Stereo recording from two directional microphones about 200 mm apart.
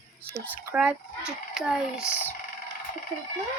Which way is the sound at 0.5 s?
10° right (ahead or behind).